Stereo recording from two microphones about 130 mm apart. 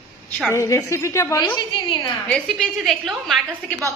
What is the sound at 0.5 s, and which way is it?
Speech, 20° left (ahead or behind).